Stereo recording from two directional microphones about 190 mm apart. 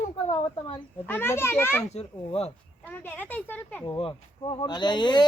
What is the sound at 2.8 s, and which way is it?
Speech, 10° left (ahead or behind).